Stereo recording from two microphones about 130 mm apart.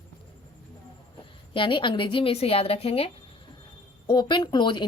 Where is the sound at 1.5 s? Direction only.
40° left (ahead or behind).